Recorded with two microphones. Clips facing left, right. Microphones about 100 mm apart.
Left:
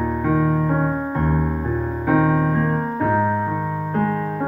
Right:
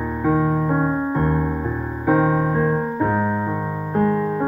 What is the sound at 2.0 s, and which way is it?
Music, 15° right (ahead or behind).